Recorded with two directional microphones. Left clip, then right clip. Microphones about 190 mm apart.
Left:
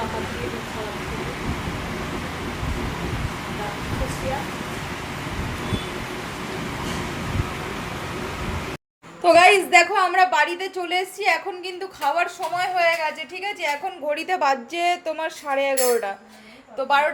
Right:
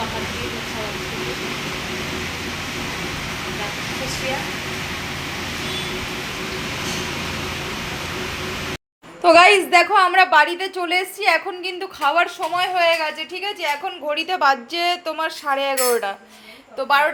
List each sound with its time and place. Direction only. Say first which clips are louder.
9.2 s a woman's voice: right 2 dB; 5° right (ahead or behind)
14.1 s speech: right 3 dB; 10° left (ahead or behind)